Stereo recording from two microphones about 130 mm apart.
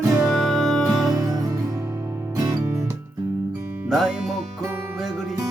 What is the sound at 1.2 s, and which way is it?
Music, 30° right (ahead or behind).